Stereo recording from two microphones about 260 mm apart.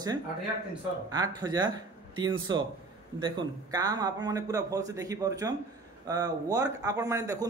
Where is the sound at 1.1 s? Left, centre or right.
Centre.